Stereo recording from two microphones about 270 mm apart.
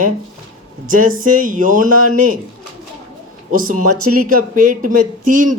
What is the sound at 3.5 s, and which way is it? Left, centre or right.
A man's voice, right.